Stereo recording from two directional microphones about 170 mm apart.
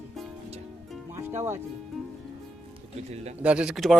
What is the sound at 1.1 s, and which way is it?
Music, 15° right (ahead or behind).